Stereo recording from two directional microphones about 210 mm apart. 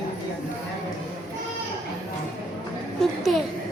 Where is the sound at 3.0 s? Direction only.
Centre (ahead or behind).